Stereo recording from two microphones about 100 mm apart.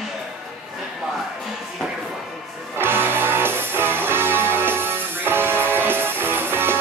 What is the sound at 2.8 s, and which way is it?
Music, 20° right (ahead or behind).